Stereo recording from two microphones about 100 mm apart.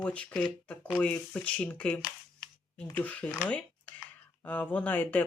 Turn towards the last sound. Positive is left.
turn(degrees=15)  # may be behind; listen again after turning